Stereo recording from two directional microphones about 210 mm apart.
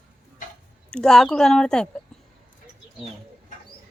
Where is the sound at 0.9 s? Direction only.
Centre (ahead or behind).